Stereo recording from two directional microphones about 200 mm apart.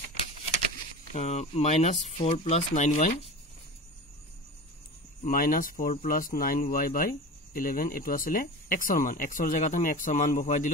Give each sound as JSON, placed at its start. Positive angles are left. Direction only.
{"t": 1.1, "sound": "speech", "side_deg": 35}
{"t": 5.2, "sound": "speech", "side_deg": 45}